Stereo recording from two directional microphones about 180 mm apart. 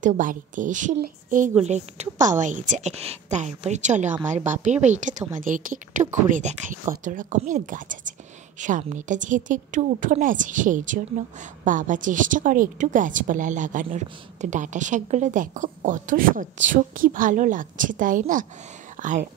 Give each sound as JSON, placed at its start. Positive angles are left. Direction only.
{"t": 0.0, "sound": "a woman's voice", "side_deg": -45}